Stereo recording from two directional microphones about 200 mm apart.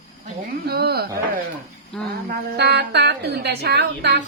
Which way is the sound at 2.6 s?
55° right (ahead or behind).